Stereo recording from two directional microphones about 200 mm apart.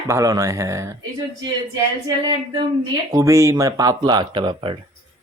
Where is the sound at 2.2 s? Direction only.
25° right (ahead or behind).